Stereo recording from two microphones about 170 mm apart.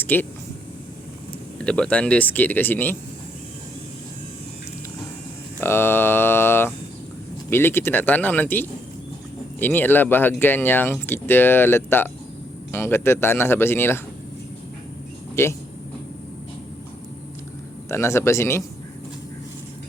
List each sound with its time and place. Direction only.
0.0 s speech: 10° left (ahead or behind)
1.5 s speech: 5° left (ahead or behind)
5.5 s speech: 15° left (ahead or behind)
15.4 s speech: 15° left (ahead or behind)
17.8 s speech: 15° left (ahead or behind)